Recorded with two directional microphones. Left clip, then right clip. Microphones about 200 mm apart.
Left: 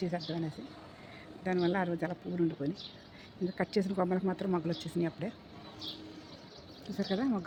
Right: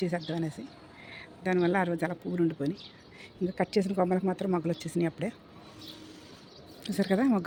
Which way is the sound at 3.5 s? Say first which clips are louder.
Right 5 dB; 20° right (ahead or behind).